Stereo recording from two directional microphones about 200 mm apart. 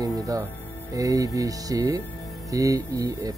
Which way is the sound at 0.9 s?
15° right (ahead or behind).